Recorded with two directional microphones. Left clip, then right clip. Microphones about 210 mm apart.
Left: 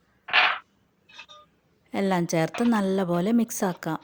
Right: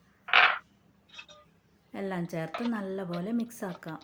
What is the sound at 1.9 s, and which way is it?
A woman's voice, 50° left (ahead or behind).